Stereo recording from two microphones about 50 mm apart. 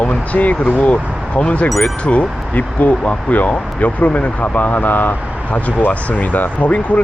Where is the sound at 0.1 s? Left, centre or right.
Left.